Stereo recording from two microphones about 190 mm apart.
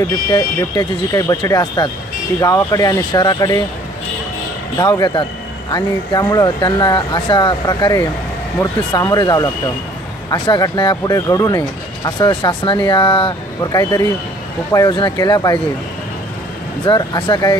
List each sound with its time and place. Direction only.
0.3 s speech: 15° left (ahead or behind)
4.7 s speech: 20° left (ahead or behind)
16.8 s speech: 20° left (ahead or behind)